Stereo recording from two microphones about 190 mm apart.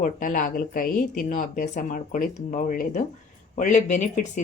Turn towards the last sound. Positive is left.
turn(degrees=40)  # may be behind; listen again after turning